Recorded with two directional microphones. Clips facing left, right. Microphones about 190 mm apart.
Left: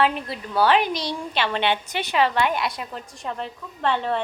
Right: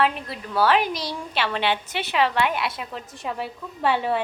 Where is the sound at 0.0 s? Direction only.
Centre (ahead or behind).